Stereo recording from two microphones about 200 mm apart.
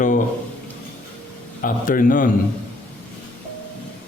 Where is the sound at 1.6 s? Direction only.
45° left (ahead or behind).